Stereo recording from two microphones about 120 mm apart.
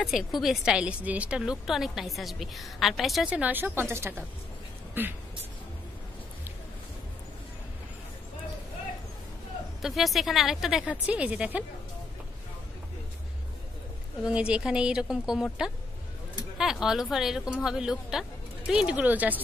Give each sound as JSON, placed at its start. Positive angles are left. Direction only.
{"t": 0.0, "sound": "a woman's voice", "side_deg": 0}
{"t": 3.3, "sound": "speech", "side_deg": -10}
{"t": 9.8, "sound": "a woman's voice", "side_deg": 0}
{"t": 14.2, "sound": "a woman's voice", "side_deg": -10}